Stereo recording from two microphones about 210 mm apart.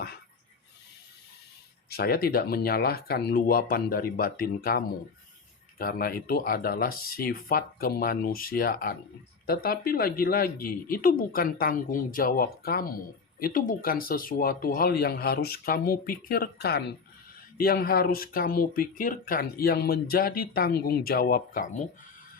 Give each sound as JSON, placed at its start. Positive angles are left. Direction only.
{"t": 1.9, "sound": "speech", "side_deg": 50}
{"t": 5.8, "sound": "speech", "side_deg": 45}